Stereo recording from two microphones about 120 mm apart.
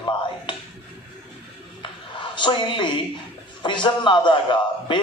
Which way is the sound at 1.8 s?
40° left (ahead or behind).